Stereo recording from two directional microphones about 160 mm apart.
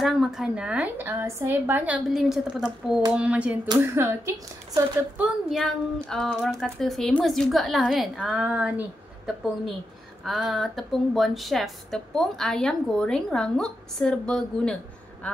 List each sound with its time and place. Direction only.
0.0 s a woman's voice: centre (ahead or behind)
5.2 s a woman's voice: centre (ahead or behind)